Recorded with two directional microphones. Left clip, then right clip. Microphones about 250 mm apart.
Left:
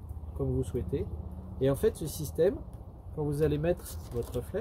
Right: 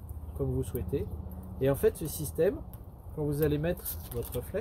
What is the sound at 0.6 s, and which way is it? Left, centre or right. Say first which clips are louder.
Speech: left 1 dB; centre.